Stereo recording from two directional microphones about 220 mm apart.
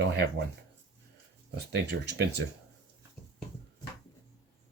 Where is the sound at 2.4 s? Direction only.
55° right (ahead or behind).